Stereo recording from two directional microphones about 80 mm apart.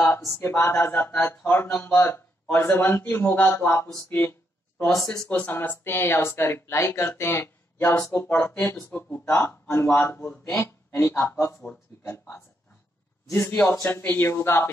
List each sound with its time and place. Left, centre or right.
0.4 s speech: left
5.0 s speech: centre
5.4 s speech: left
8.5 s speech: left